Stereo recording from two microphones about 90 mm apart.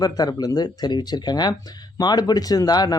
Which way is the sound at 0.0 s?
45° left (ahead or behind).